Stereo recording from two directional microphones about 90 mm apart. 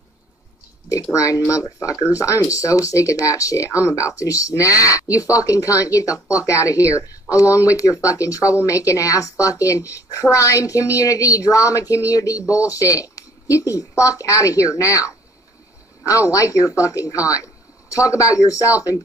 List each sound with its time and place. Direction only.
1.1 s speech: 35° left (ahead or behind)